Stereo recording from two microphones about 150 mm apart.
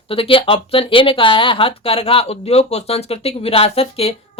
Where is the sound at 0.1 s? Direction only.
35° left (ahead or behind).